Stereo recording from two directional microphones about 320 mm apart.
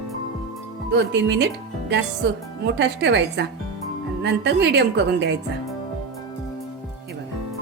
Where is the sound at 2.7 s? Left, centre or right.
Right.